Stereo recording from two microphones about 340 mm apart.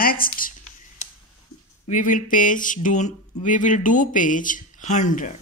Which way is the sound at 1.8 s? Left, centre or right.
Left.